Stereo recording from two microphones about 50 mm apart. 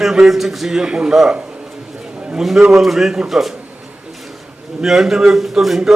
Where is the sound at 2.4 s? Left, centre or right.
Centre.